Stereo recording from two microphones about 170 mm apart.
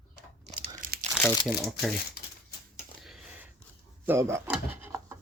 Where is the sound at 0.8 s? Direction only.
55° right (ahead or behind).